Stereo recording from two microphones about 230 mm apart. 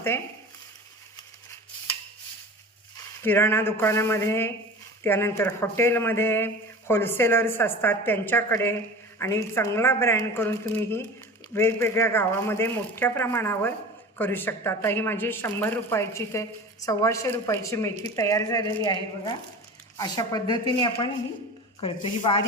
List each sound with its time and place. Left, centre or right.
3.2 s speech: centre